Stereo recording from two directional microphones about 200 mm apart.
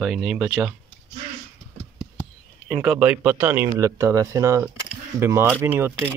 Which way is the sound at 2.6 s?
Centre (ahead or behind).